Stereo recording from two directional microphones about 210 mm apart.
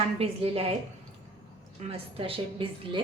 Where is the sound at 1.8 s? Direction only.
25° right (ahead or behind).